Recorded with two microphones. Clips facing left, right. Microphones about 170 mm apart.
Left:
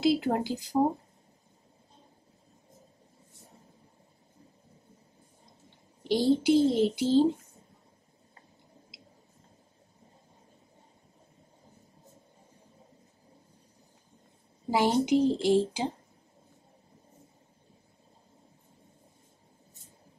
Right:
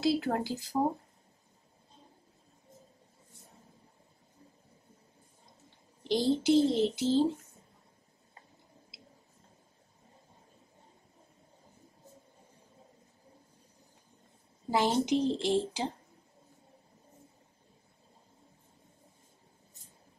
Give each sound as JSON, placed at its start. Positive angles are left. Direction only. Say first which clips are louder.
{"t": 0.0, "sound": "speech", "louder": "left 3 dB", "side_deg": 20}
{"t": 6.0, "sound": "speech", "louder": "left 3 dB", "side_deg": 10}
{"t": 14.7, "sound": "speech", "louder": "left 3 dB", "side_deg": 10}